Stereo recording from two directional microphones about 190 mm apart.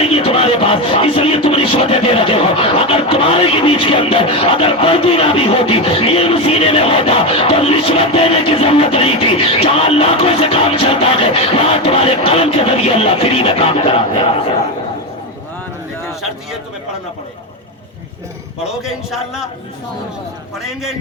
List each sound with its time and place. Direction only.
0.0 s speech: 30° left (ahead or behind)
18.7 s a man's voice: centre (ahead or behind)